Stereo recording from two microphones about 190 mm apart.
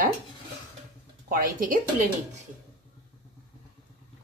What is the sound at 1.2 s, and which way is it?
Speech, 45° right (ahead or behind).